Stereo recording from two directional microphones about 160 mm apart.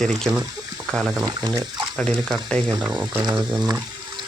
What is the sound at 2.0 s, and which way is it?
Speech, 5° left (ahead or behind).